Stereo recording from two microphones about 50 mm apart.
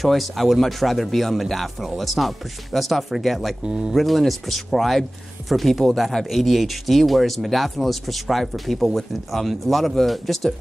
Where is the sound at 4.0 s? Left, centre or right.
Centre.